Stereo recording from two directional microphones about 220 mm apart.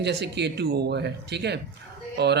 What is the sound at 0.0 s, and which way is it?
Speech, 50° right (ahead or behind).